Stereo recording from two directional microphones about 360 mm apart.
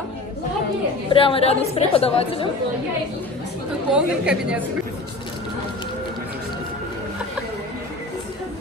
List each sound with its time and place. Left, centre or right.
1.1 s a woman's voice: centre
3.9 s a woman's voice: centre